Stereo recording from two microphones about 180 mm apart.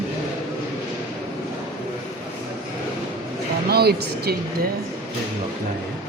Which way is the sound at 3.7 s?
60° right (ahead or behind).